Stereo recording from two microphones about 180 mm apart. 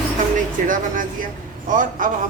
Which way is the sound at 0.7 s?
50° right (ahead or behind).